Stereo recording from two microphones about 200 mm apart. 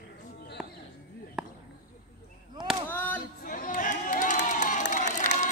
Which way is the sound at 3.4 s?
45° left (ahead or behind).